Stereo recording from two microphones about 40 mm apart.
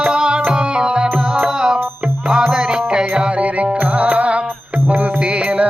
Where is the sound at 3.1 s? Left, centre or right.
Right.